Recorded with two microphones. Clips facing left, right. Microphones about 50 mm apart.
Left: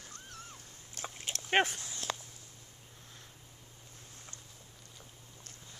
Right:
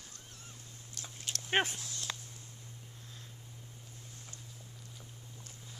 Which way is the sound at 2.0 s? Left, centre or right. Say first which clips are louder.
Left 5 dB; left.